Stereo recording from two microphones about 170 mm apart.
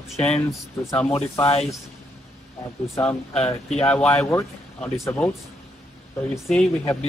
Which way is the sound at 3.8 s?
5° left (ahead or behind).